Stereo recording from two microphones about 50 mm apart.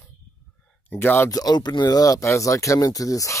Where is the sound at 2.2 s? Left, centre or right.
Left.